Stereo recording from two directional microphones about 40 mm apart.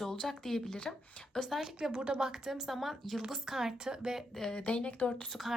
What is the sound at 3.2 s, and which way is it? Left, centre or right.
A woman's voice, centre.